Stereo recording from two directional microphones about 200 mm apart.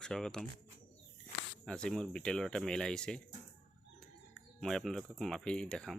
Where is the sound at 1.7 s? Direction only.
5° left (ahead or behind).